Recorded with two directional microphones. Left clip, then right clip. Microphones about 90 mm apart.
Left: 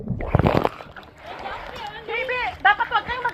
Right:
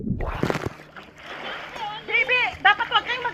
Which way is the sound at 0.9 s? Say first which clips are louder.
Left 1 dB; 10° right (ahead or behind).